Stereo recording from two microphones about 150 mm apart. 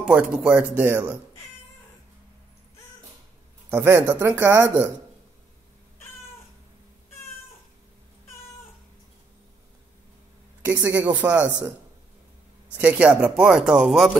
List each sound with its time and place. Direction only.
0.0 s speech: 5° right (ahead or behind)
3.7 s speech: 20° right (ahead or behind)
10.6 s speech: 15° right (ahead or behind)
12.7 s speech: 10° right (ahead or behind)